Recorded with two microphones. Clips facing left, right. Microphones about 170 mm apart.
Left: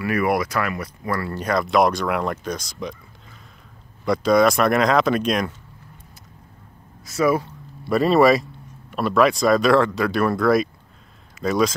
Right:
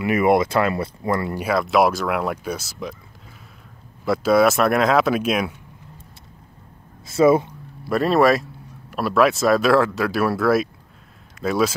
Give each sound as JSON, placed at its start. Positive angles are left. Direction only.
{"t": 0.0, "sound": "speech", "side_deg": -20}
{"t": 1.4, "sound": "speech", "side_deg": -5}
{"t": 4.0, "sound": "speech", "side_deg": -5}
{"t": 7.1, "sound": "speech", "side_deg": -25}
{"t": 7.9, "sound": "speech", "side_deg": 0}